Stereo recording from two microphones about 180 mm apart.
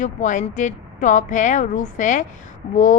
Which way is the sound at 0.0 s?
45° left (ahead or behind).